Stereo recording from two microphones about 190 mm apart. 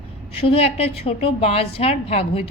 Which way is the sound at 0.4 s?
30° left (ahead or behind).